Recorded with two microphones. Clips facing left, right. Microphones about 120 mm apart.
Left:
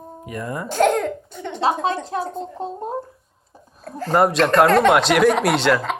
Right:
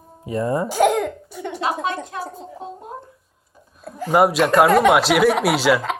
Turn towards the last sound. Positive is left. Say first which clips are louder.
# even
turn(degrees=-5)  # may be behind; listen again after turning